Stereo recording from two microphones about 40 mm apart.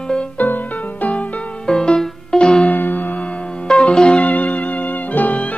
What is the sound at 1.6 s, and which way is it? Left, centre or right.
Music, centre.